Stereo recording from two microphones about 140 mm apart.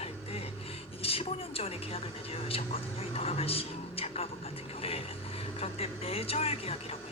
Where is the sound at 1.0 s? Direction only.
45° left (ahead or behind).